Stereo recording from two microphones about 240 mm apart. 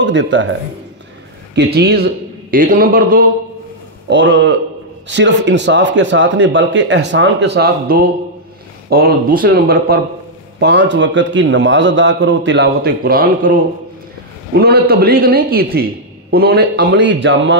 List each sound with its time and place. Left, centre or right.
0.0 s a man's voice: right
4.1 s a man's voice: right
14.6 s a man's voice: right